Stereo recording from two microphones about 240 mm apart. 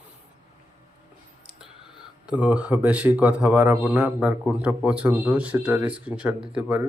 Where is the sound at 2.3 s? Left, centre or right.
Centre.